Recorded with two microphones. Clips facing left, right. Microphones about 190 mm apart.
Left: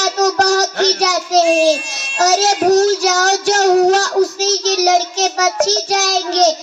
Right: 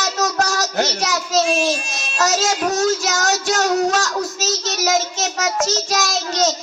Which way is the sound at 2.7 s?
65° left (ahead or behind).